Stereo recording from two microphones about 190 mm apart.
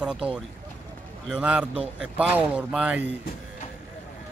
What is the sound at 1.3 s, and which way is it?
Speech, 5° right (ahead or behind).